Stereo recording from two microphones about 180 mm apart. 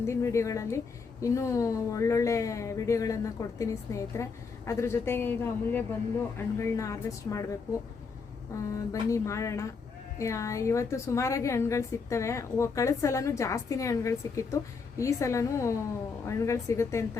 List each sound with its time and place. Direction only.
0.0 s a woman's voice: 15° left (ahead or behind)
8.7 s a woman's voice: 15° left (ahead or behind)